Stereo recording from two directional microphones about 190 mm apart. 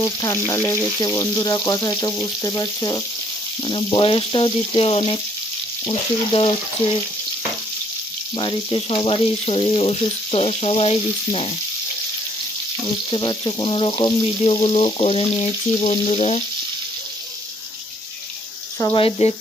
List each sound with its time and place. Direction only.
0.0 s frying: 15° left (ahead or behind)
8.4 s frying: 25° left (ahead or behind)
12.8 s frying: 25° left (ahead or behind)
18.8 s frying: 20° left (ahead or behind)
19.0 s frying: 35° left (ahead or behind)